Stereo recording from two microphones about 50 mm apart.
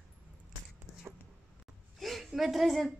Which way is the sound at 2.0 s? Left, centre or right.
Centre.